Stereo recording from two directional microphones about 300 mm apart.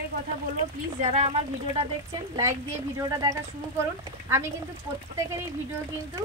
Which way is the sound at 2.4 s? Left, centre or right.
Centre.